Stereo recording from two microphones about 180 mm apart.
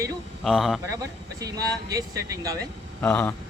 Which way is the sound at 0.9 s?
20° right (ahead or behind).